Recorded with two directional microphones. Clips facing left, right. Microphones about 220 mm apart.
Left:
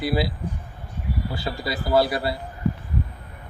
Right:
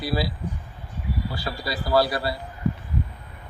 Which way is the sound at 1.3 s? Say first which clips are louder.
Left 2 dB; 25° left (ahead or behind).